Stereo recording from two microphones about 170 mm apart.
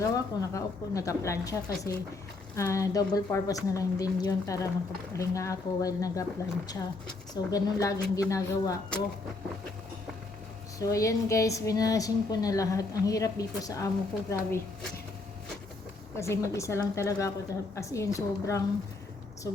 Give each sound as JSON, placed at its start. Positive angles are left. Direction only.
{"t": 0.0, "sound": "a woman's voice", "side_deg": 20}
{"t": 7.5, "sound": "a woman's voice", "side_deg": 20}
{"t": 10.8, "sound": "a woman's voice", "side_deg": 20}
{"t": 16.1, "sound": "a woman's voice", "side_deg": 15}